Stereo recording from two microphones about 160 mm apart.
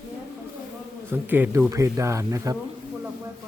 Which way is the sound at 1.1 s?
15° right (ahead or behind).